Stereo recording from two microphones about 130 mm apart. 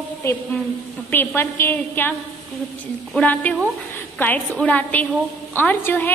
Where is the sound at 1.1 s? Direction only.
15° left (ahead or behind).